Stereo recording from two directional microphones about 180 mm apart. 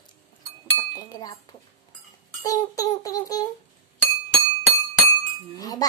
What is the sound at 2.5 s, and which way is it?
A child's voice, 20° left (ahead or behind).